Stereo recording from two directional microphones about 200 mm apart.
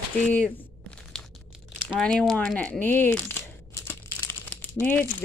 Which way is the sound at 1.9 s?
5° left (ahead or behind).